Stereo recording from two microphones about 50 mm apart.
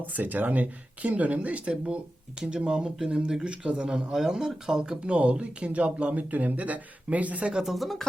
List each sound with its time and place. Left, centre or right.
0.0 s speech: right
7.5 s speech: centre